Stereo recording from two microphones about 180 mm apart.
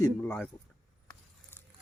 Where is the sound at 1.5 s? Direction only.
10° left (ahead or behind).